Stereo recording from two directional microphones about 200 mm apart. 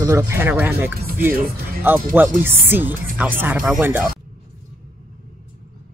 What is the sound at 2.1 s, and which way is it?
Speech, 10° right (ahead or behind).